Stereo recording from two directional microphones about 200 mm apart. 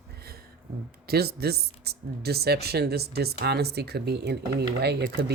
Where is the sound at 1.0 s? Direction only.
50° right (ahead or behind).